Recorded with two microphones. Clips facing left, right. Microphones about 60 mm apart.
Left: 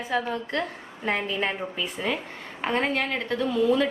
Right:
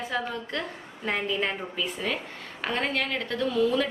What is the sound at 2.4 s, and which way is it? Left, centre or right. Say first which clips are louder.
Speech: left 4 dB; left.